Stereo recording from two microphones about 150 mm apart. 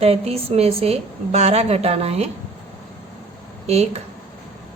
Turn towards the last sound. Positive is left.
turn(degrees=-45)  # may be behind; listen again after turning